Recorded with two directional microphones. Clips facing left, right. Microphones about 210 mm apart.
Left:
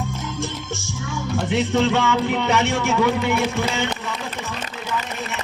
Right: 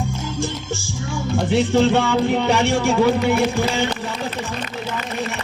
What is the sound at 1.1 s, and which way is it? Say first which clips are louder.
Music: right 3 dB; 30° right (ahead or behind).